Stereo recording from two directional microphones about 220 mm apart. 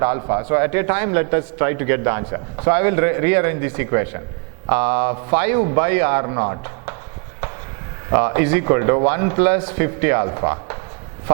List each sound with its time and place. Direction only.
0.0 s a man's voice: 15° right (ahead or behind)
8.1 s a man's voice: 15° right (ahead or behind)